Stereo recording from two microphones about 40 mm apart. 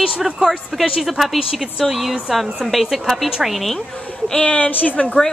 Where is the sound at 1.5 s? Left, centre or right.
Centre.